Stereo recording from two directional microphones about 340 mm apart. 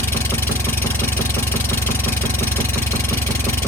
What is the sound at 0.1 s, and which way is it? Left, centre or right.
Vehicle, centre.